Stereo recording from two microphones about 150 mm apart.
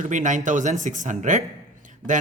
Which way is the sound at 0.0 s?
55° right (ahead or behind).